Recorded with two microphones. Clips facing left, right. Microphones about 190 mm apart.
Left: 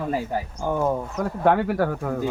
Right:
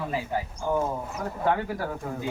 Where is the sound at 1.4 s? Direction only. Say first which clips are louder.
Left 7 dB; 70° left (ahead or behind).